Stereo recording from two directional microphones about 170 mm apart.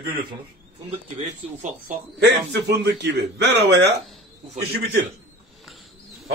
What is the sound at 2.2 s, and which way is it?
A man's voice, 85° right.